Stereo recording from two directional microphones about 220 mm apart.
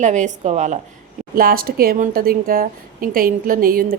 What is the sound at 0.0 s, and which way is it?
A woman's voice, 35° right (ahead or behind).